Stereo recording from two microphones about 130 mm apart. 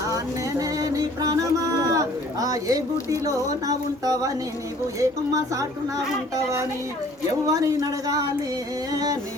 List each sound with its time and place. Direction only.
0.6 s music: 25° right (ahead or behind)
1.9 s a sound: 25° right (ahead or behind)
3.7 s speech: 30° right (ahead or behind)